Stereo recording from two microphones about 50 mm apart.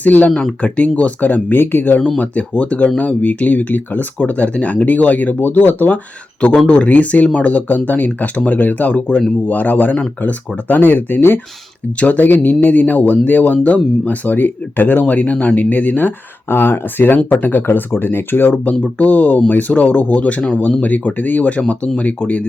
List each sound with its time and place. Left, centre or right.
0.0 s speech: left
2.0 s speech: left
6.7 s speech: left
18.5 s speech: left
20.2 s speech: left